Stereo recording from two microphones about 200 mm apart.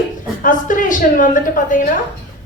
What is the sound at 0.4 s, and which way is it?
A woman's voice, 40° left (ahead or behind).